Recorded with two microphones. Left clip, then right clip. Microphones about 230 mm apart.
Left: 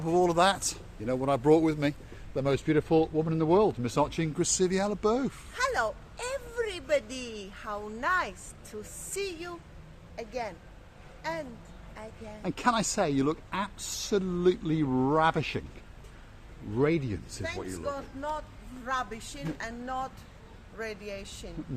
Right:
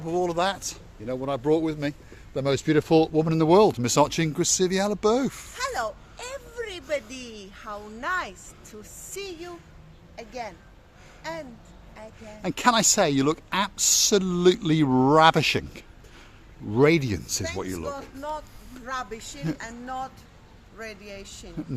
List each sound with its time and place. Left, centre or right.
0.0 s speech: centre
2.3 s speech: right
5.5 s speech: centre
12.4 s speech: right
16.7 s speech: right
17.8 s speech: centre